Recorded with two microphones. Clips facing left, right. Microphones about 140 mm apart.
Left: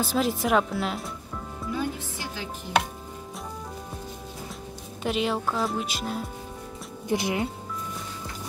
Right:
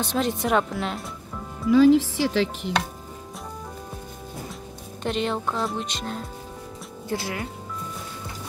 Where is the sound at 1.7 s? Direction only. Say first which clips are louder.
Right 16 dB; 90° right.